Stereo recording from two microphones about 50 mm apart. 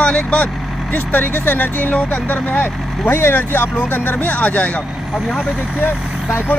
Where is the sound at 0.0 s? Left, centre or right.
Left.